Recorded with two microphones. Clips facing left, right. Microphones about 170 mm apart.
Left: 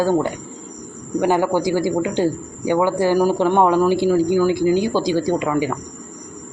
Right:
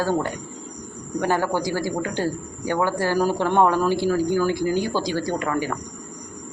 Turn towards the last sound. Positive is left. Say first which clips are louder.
# left 5 dB
turn(degrees=15)  # may be behind; listen again after turning